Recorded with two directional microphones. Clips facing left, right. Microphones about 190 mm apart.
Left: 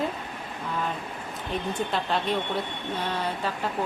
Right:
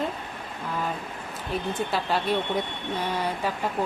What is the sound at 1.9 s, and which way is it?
Speech, 5° right (ahead or behind).